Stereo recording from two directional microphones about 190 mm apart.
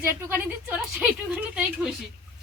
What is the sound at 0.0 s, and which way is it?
A woman's voice, 10° right (ahead or behind).